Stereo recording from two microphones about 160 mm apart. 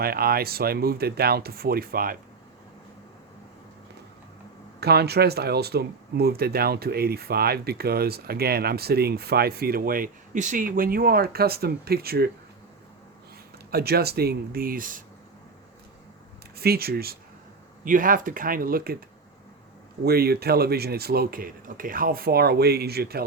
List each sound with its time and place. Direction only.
0.0 s speech: 70° right (ahead or behind)
4.8 s speech: 90° right; by 12.3 s 75° right (ahead or behind)
13.7 s speech: 75° right (ahead or behind); by 15.0 s 60° right (ahead or behind)
16.6 s speech: 75° right (ahead or behind)
17.8 s speech: 55° right (ahead or behind)
20.1 s speech: 75° right (ahead or behind)